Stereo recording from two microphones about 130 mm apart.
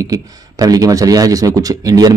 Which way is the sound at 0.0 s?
30° right (ahead or behind).